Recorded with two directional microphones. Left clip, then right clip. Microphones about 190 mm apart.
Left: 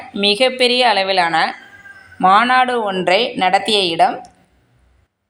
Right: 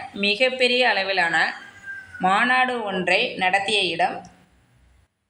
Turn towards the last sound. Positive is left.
turn(degrees=25)  # may be behind; listen again after turning